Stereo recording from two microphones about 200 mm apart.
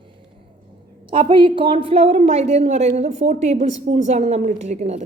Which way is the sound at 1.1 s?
25° right (ahead or behind).